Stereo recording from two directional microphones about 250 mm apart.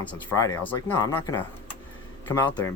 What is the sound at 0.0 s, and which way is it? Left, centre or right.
Speech, centre.